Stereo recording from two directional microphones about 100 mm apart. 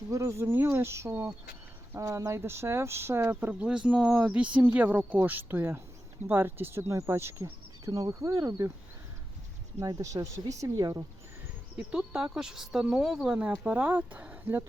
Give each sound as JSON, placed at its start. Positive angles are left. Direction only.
{"t": 0.1, "sound": "speech", "side_deg": -30}
{"t": 9.8, "sound": "speech", "side_deg": -35}
{"t": 11.8, "sound": "speech", "side_deg": -10}